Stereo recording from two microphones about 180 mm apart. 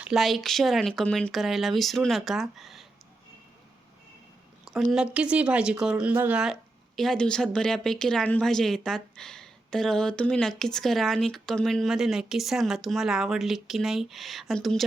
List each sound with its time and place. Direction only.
0.0 s speech: centre (ahead or behind)
4.9 s speech: 5° right (ahead or behind)